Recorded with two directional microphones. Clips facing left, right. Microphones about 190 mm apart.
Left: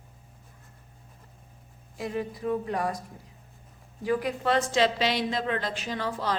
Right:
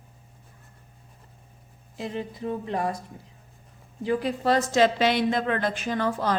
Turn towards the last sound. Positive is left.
turn(degrees=-50)  # may be behind; listen again after turning